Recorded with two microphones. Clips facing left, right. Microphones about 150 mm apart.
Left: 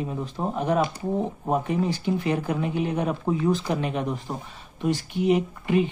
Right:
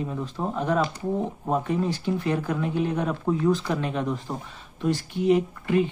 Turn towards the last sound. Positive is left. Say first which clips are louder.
# even
turn(degrees=15)  # may be behind; listen again after turning